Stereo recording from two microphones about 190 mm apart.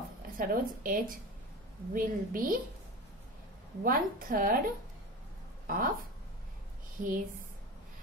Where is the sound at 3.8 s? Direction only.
45° right (ahead or behind).